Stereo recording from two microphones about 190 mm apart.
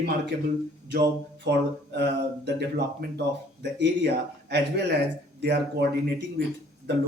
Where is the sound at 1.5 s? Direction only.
65° right (ahead or behind).